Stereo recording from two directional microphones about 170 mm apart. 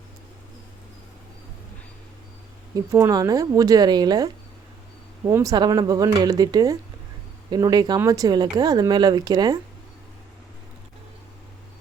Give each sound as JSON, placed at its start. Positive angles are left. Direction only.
{"t": 2.7, "sound": "speech", "side_deg": -20}
{"t": 5.3, "sound": "speech", "side_deg": -20}